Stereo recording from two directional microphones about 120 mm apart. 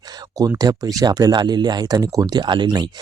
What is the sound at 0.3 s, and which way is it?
Speech, 30° right (ahead or behind).